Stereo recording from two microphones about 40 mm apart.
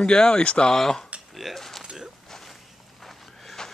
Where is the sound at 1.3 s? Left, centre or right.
Centre.